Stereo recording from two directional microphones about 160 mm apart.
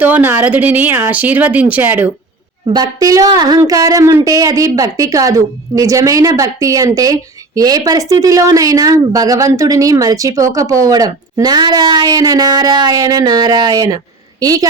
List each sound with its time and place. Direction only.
0.0 s speech: 10° right (ahead or behind)
2.6 s speech: 25° right (ahead or behind)